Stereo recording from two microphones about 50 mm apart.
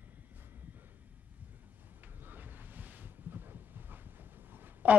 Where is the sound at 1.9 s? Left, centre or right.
Right.